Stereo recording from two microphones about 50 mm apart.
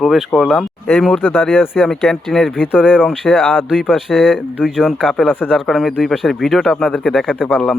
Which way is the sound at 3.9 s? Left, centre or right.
Centre.